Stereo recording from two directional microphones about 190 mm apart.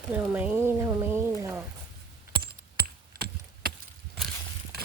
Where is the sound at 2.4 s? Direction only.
55° right (ahead or behind).